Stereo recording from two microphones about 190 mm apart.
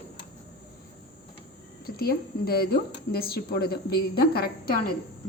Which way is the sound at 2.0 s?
55° left (ahead or behind).